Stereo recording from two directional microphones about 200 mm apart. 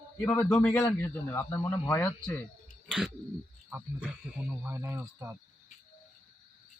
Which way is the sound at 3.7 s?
5° right (ahead or behind).